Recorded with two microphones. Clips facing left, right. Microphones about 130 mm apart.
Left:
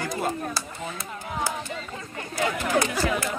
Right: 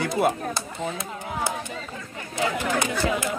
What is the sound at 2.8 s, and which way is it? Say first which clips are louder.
Speech: left 1 dB; 20° right (ahead or behind).